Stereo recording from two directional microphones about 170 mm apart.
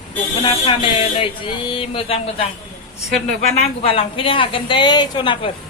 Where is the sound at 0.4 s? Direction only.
30° left (ahead or behind).